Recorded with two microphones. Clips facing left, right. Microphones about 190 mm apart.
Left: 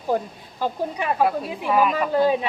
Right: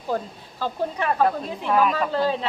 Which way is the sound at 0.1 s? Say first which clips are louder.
Left 2 dB; 15° left (ahead or behind).